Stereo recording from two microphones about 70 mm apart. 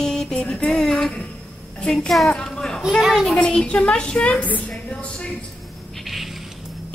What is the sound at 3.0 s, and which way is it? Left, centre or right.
Speech, centre.